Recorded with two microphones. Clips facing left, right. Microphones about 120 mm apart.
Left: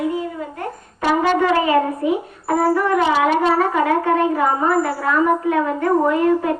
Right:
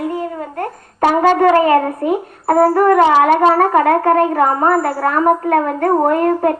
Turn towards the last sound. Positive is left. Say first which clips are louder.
# right 3 dB
turn(degrees=-50)  # may be behind; listen again after turning